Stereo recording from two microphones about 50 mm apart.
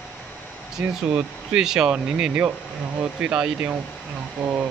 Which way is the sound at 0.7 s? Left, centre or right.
Centre.